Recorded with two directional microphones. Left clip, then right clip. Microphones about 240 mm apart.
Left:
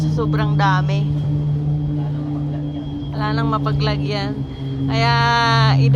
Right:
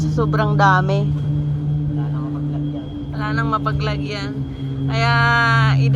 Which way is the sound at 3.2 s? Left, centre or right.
Centre.